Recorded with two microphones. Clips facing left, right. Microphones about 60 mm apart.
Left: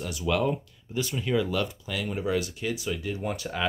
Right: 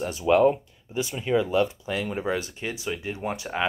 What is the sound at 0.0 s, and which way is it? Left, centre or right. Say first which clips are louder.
Speech: right 7 dB; right.